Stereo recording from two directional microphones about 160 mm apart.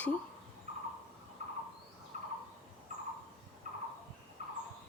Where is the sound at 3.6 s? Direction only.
50° right (ahead or behind).